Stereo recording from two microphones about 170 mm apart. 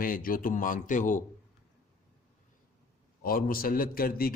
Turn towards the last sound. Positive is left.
turn(degrees=60)  # may be behind; listen again after turning